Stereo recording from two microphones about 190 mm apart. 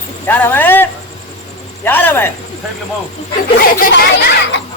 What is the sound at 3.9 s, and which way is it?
Speech, 65° left (ahead or behind).